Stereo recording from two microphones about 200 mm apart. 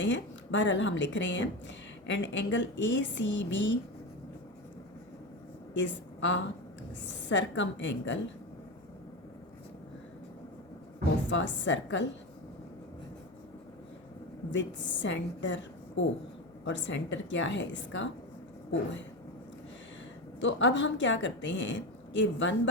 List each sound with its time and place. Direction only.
0.0 s a woman's voice: 65° left (ahead or behind)
5.7 s a woman's voice: 65° left (ahead or behind)
11.3 s a woman's voice: 65° left (ahead or behind)
14.5 s a woman's voice: 65° left (ahead or behind)
20.4 s a woman's voice: 65° left (ahead or behind)